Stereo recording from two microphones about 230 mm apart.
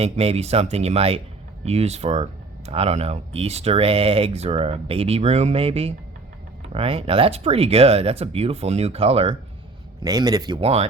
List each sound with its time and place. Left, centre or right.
0.0 s speech: right